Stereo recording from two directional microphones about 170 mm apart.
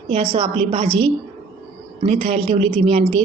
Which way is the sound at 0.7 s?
30° right (ahead or behind).